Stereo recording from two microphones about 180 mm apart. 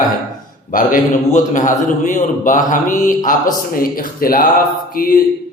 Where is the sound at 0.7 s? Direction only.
50° left (ahead or behind).